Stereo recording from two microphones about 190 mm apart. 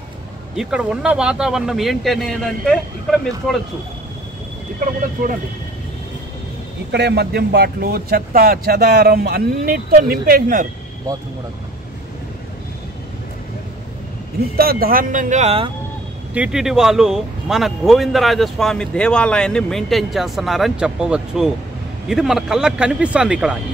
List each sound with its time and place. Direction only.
0.6 s speech: 5° right (ahead or behind)
6.9 s speech: 60° right (ahead or behind)
14.6 s speech: 50° right (ahead or behind); by 15.7 s 30° right (ahead or behind)
16.3 s speech: 5° right (ahead or behind)